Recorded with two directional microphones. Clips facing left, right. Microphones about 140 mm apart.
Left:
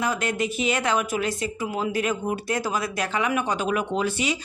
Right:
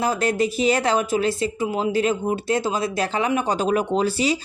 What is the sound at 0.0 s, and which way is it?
A woman's voice, 35° right (ahead or behind).